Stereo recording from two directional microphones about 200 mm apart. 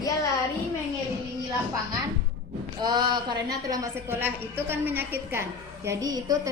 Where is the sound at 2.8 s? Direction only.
20° right (ahead or behind).